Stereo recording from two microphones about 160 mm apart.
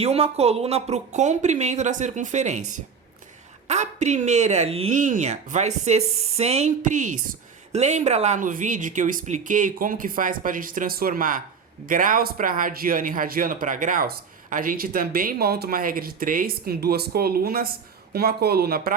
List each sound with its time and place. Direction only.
0.0 s speech: 40° right (ahead or behind)
4.9 s speech: 50° right (ahead or behind); by 18.9 s 75° right (ahead or behind)